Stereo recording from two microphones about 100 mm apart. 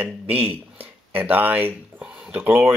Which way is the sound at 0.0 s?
15° right (ahead or behind).